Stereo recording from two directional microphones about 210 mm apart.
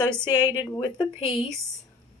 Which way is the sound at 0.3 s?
20° left (ahead or behind).